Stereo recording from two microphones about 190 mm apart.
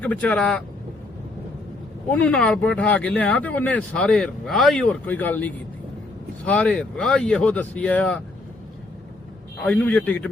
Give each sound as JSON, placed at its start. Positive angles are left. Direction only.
{"t": 0.0, "sound": "speech", "side_deg": 5}
{"t": 2.0, "sound": "speech", "side_deg": 5}
{"t": 9.6, "sound": "speech", "side_deg": 10}